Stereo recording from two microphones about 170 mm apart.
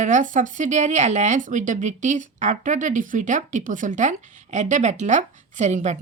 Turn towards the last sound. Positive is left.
turn(degrees=-45)  # may be behind; listen again after turning